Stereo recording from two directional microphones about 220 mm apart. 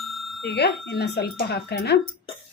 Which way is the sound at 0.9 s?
50° left (ahead or behind).